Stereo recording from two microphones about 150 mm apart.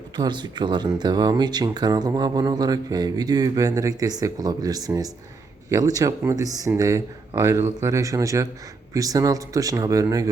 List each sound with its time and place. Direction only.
0.2 s speech: 30° right (ahead or behind)